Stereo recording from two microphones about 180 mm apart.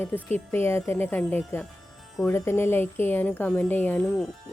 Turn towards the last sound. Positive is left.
turn(degrees=10)  # may be behind; listen again after turning